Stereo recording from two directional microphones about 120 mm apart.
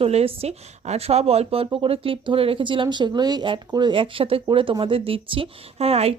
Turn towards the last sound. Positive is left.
turn(degrees=-60)  # may be behind; listen again after turning